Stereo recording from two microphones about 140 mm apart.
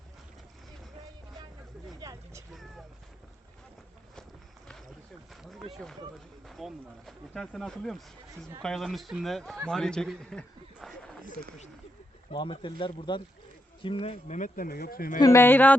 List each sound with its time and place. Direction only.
2.0 s vehicle: 25° right (ahead or behind)
2.5 s a sound: centre (ahead or behind)
5.3 s a sound: centre (ahead or behind)
5.7 s speech: 5° left (ahead or behind)
12.3 s speech: 35° left (ahead or behind); by 15.2 s 90° left
15.2 s a man's voice: 20° left (ahead or behind)